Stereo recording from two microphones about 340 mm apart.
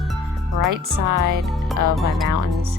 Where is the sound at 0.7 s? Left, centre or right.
Right.